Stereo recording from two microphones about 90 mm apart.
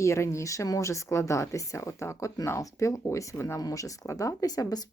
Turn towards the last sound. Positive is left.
turn(degrees=40)  # may be behind; listen again after turning